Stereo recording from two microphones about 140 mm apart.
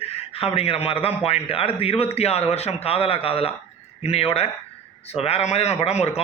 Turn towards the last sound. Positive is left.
turn(degrees=50)  # may be behind; listen again after turning